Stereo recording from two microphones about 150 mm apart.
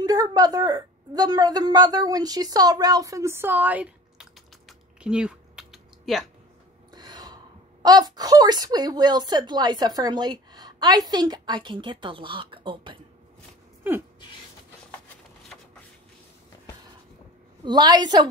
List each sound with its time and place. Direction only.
0.0 s a woman's voice: 25° right (ahead or behind); by 6.2 s centre (ahead or behind)
6.9 s gasp: 30° right (ahead or behind)
7.8 s speech: 25° right (ahead or behind)
17.6 s speech: 25° right (ahead or behind)